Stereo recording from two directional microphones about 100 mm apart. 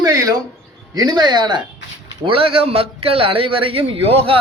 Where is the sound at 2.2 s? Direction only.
65° right (ahead or behind).